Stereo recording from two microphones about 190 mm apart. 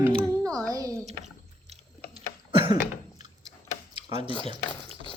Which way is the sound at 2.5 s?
25° right (ahead or behind).